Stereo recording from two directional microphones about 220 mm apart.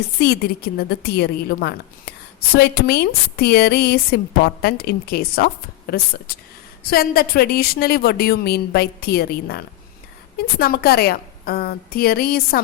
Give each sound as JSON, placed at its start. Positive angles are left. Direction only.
{"t": 0.2, "sound": "a woman's voice", "side_deg": 45}